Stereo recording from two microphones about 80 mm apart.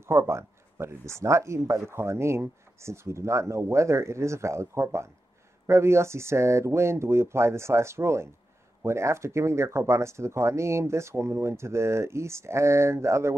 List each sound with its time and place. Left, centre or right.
0.0 s speech: right